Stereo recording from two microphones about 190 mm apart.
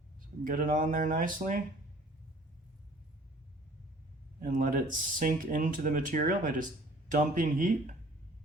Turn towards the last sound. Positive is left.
turn(degrees=-40)  # may be behind; listen again after turning